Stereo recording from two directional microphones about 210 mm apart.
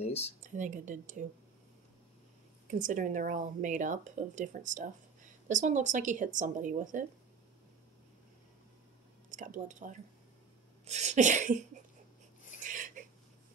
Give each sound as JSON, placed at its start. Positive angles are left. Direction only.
{"t": 0.0, "sound": "speech", "side_deg": 30}
{"t": 0.4, "sound": "speech", "side_deg": -35}
{"t": 2.7, "sound": "speech", "side_deg": -35}
{"t": 9.3, "sound": "speech", "side_deg": -35}
{"t": 12.6, "sound": "a sound", "side_deg": -40}